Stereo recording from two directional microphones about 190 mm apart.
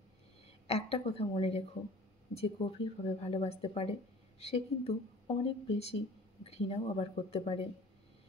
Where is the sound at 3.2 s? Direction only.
35° left (ahead or behind).